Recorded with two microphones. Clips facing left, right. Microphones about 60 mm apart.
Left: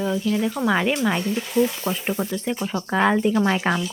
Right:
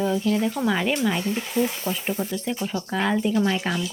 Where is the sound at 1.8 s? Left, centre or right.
Left.